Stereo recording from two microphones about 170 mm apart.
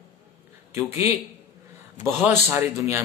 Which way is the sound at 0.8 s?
15° right (ahead or behind).